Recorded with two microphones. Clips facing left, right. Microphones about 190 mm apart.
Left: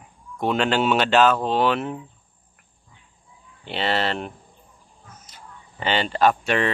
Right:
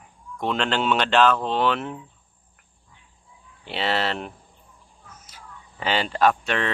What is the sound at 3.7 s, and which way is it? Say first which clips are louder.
Speech: left 1 dB; centre (ahead or behind).